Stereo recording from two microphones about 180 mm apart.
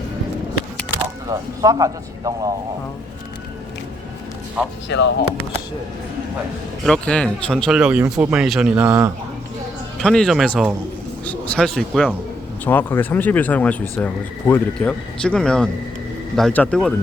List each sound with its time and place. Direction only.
1.3 s a man's voice: 20° right (ahead or behind)
4.9 s speech: 80° left
6.8 s speech: 5° left (ahead or behind)
7.8 s speech: 5° right (ahead or behind)
10.0 s speech: 5° left (ahead or behind)